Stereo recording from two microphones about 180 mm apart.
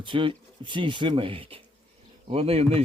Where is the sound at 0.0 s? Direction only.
30° right (ahead or behind).